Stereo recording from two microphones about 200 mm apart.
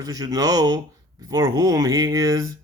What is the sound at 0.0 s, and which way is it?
Speech, 15° right (ahead or behind).